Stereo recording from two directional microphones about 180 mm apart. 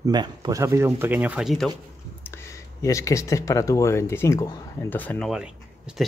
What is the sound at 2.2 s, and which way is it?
Speech, 15° left (ahead or behind).